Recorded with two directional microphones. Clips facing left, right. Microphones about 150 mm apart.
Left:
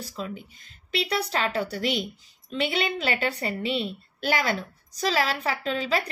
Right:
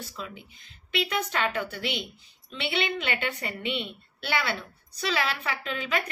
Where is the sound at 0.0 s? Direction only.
35° left (ahead or behind).